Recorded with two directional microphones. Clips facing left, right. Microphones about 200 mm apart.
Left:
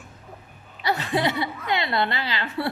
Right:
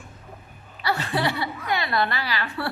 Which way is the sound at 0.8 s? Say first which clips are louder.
Left 1 dB; 20° left (ahead or behind).